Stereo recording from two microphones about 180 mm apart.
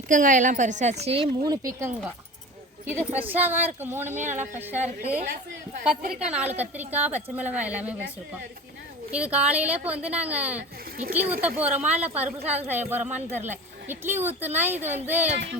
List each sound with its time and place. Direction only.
0.1 s a woman's voice: 45° right (ahead or behind)
1.5 s a woman's voice: 20° right (ahead or behind)
6.0 s a woman's voice: 45° right (ahead or behind)
6.2 s a woman's voice: 5° right (ahead or behind)
9.1 s a woman's voice: 5° right (ahead or behind)